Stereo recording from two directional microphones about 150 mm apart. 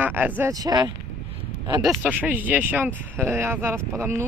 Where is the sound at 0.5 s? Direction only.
25° right (ahead or behind).